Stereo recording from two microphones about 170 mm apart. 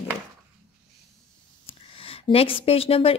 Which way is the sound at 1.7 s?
35° left (ahead or behind).